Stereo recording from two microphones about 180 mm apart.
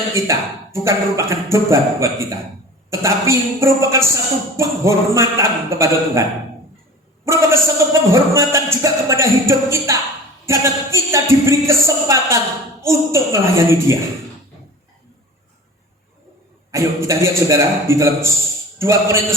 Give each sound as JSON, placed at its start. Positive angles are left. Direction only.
{"t": 0.1, "sound": "speech", "side_deg": -15}
{"t": 7.3, "sound": "speech", "side_deg": -15}
{"t": 16.7, "sound": "speech", "side_deg": -15}